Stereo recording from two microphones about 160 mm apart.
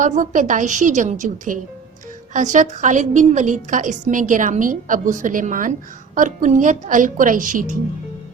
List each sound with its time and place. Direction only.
0.0 s a woman's voice: 55° right (ahead or behind)